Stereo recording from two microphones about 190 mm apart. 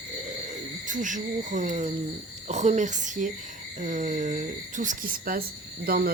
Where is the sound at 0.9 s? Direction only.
40° right (ahead or behind).